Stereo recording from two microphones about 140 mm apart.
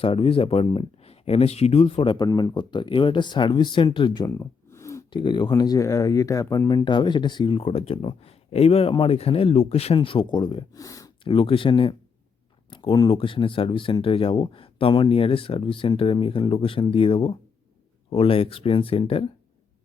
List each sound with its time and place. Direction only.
0.0 s speech: 40° left (ahead or behind)
2.1 s speech: 30° left (ahead or behind)
4.3 s a sound: 20° left (ahead or behind)
5.1 s speech: 35° left (ahead or behind)
10.8 s speech: 25° left (ahead or behind)
11.2 s speech: 40° left (ahead or behind)